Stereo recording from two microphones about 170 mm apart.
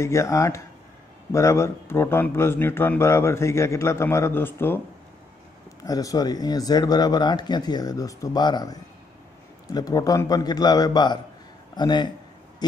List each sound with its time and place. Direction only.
0.0 s speech: 15° left (ahead or behind)
5.9 s a man's voice: 20° left (ahead or behind)